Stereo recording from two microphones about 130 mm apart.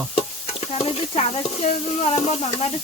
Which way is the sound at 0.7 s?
50° left (ahead or behind).